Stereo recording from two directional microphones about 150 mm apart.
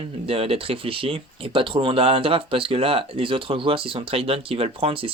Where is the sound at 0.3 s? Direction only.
40° right (ahead or behind).